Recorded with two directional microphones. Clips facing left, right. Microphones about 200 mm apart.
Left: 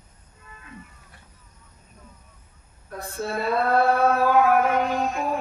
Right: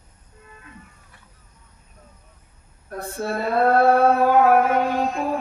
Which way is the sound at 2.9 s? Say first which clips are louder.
Right 2 dB; 50° right (ahead or behind).